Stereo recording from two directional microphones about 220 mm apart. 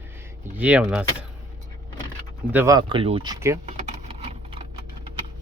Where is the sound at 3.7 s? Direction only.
30° right (ahead or behind).